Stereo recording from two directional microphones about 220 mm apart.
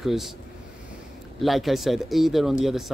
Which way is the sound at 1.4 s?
Centre (ahead or behind).